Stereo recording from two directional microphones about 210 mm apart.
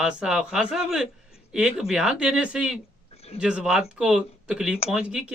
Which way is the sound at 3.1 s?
30° left (ahead or behind).